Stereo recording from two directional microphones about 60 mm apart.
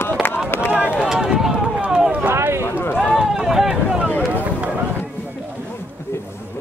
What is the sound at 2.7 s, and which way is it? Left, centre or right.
Run, left.